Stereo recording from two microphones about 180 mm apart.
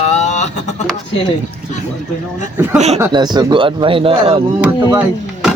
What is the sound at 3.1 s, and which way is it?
Speech, 25° right (ahead or behind).